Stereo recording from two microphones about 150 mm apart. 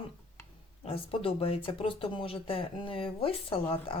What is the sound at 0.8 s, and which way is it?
Speech, 40° left (ahead or behind).